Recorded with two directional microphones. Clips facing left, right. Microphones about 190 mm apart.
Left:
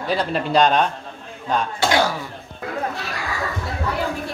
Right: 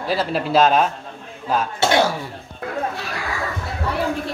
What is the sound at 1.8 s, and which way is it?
Speech, 25° right (ahead or behind).